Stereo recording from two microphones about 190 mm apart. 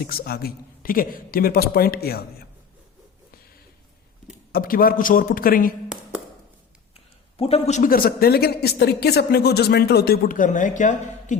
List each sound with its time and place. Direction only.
0.0 s a man's voice: 50° left (ahead or behind)
4.5 s a man's voice: 50° left (ahead or behind)
5.9 s a sound: 5° right (ahead or behind)
6.9 s a man's voice: 30° left (ahead or behind)